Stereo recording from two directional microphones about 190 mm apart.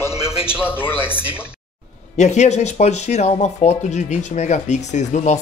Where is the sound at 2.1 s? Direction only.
35° left (ahead or behind).